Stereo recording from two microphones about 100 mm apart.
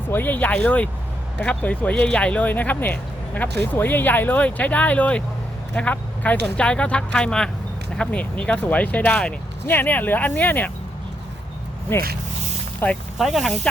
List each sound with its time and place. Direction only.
0.1 s speech: 20° left (ahead or behind)
11.9 s speech: 25° left (ahead or behind)
13.1 s speech: centre (ahead or behind)